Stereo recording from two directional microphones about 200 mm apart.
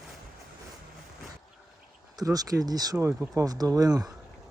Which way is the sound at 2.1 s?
20° right (ahead or behind).